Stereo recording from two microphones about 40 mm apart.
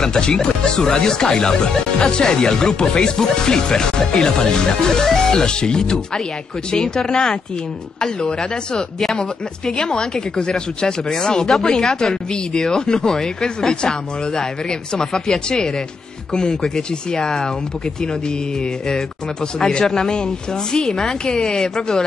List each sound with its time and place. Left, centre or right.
0.0 s speech: centre
19.6 s speech: centre